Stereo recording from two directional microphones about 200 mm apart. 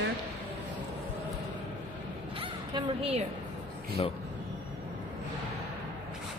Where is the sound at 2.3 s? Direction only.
25° right (ahead or behind).